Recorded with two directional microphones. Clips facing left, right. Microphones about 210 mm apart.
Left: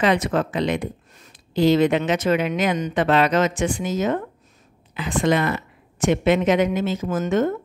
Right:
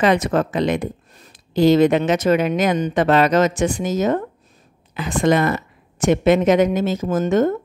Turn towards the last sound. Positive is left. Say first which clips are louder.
# right 4 dB
turn(degrees=-40)  # may be behind; listen again after turning